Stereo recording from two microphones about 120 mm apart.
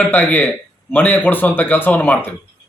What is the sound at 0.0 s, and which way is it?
A man's voice, 15° left (ahead or behind).